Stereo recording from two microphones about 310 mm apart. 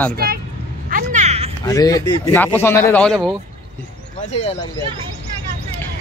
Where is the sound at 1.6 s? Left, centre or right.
Centre.